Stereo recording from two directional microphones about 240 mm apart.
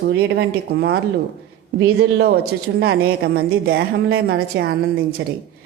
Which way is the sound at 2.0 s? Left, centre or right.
Right.